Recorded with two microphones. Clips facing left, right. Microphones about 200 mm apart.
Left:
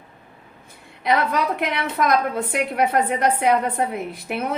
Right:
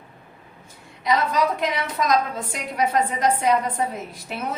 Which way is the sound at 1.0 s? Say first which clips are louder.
Even; 60° left (ahead or behind).